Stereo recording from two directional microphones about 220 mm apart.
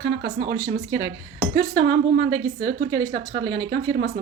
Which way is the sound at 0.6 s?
15° right (ahead or behind).